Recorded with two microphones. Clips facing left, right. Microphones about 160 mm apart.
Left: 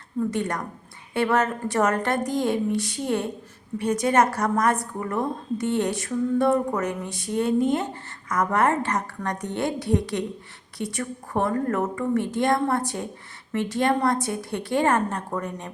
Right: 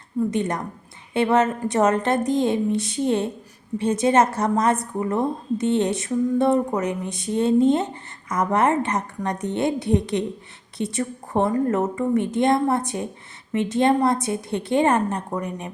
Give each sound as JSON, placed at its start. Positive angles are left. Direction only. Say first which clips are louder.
{"t": 0.3, "sound": "a woman's voice", "louder": "right 3 dB", "side_deg": -20}